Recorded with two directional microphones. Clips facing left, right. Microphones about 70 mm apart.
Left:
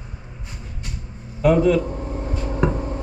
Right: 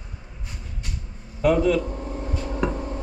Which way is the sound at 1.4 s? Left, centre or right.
Left.